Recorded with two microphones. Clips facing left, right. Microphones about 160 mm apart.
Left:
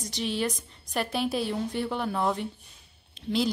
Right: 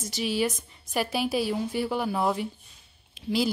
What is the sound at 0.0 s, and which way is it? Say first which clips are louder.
A woman's voice: right 2 dB; 5° right (ahead or behind).